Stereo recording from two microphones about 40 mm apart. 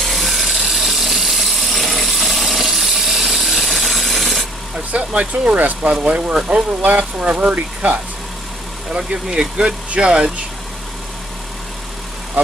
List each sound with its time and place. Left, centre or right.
0.0 s tools: centre
4.9 s speech: right
7.8 s speech: right
8.9 s speech: right